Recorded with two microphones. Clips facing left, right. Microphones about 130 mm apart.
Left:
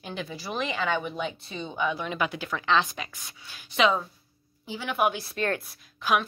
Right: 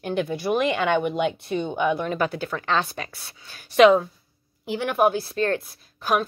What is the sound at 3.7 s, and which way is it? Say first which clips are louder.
Speech: right 9 dB; 65° right (ahead or behind).